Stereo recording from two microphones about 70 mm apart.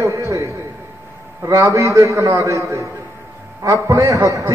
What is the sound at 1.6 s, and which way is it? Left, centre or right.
A man's voice, right.